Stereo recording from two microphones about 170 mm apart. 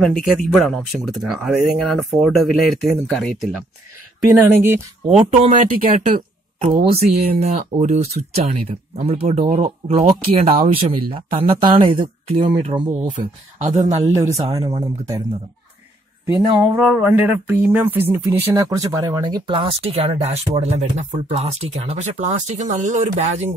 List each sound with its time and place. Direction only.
0.0 s speech: centre (ahead or behind)
4.4 s speech: 15° right (ahead or behind)
5.0 s speech: 40° right (ahead or behind)
14.5 s speech: 25° right (ahead or behind)
16.3 s speech: 5° right (ahead or behind); by 23.5 s 40° right (ahead or behind)